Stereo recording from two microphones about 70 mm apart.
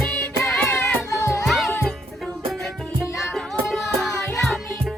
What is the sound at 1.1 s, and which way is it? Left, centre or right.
Music, left.